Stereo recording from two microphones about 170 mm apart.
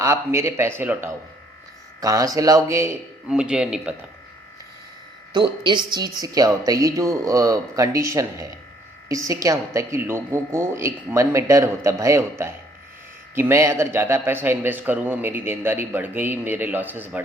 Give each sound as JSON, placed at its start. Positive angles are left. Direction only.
{"t": 0.0, "sound": "a man's voice", "side_deg": -15}
{"t": 3.2, "sound": "speech", "side_deg": -5}
{"t": 5.3, "sound": "a man's voice", "side_deg": -25}